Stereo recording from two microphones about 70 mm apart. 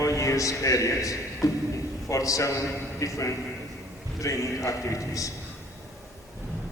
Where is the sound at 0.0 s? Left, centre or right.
Left.